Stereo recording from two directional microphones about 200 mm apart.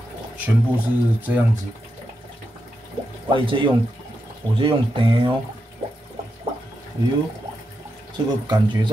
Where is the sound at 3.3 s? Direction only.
25° right (ahead or behind).